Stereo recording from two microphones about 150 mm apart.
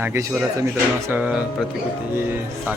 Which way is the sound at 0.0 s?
15° right (ahead or behind).